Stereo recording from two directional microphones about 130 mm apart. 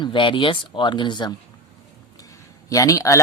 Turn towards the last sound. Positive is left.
turn(degrees=25)  # may be behind; listen again after turning